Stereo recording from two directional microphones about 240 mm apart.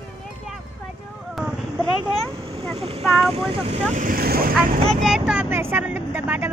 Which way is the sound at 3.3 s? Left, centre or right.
Right.